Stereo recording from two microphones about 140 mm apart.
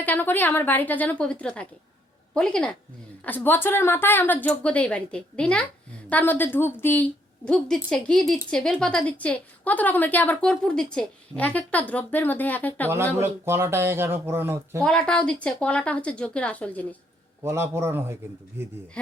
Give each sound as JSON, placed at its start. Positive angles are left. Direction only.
{"t": 0.0, "sound": "a woman's voice", "side_deg": 15}
{"t": 13.1, "sound": "speech", "side_deg": -20}
{"t": 14.8, "sound": "a woman's voice", "side_deg": 5}
{"t": 17.4, "sound": "speech", "side_deg": -20}